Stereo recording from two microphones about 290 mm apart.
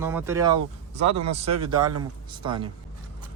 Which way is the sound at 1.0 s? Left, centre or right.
Right.